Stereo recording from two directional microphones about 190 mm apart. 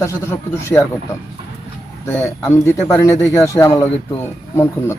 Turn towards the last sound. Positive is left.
turn(degrees=15)  # may be behind; listen again after turning